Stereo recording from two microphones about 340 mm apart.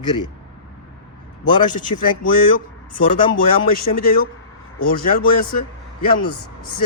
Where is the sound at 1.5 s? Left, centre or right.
Centre.